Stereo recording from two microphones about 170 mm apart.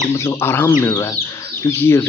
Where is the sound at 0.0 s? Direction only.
20° left (ahead or behind).